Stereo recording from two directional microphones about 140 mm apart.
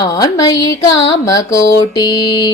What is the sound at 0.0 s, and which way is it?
Music, 25° left (ahead or behind).